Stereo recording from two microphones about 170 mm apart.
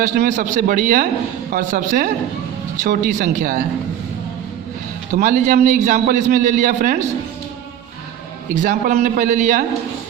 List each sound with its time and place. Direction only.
0.0 s a man's voice: 45° right (ahead or behind)
5.1 s a man's voice: 45° right (ahead or behind)
8.5 s a man's voice: 50° right (ahead or behind)